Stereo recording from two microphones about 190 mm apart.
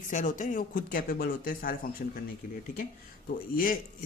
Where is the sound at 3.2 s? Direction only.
50° left (ahead or behind).